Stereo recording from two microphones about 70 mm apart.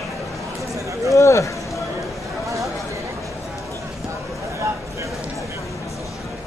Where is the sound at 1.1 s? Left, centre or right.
Left.